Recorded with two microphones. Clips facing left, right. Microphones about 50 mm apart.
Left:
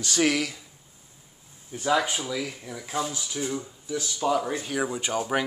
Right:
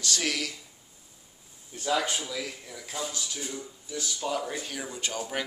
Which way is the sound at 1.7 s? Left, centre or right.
Centre.